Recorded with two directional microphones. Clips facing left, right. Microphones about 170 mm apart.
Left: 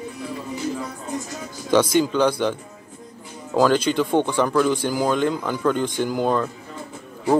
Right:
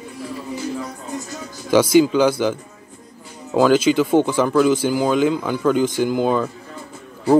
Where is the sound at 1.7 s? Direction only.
5° right (ahead or behind).